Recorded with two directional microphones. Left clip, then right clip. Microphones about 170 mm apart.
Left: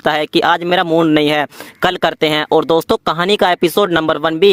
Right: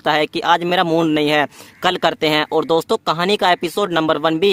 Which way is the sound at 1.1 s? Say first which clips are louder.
Left 3 dB; 40° left (ahead or behind).